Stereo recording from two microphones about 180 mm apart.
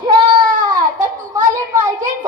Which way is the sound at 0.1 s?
30° right (ahead or behind).